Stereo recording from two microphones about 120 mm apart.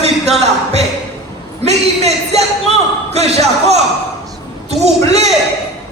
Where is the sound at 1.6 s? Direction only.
65° right (ahead or behind).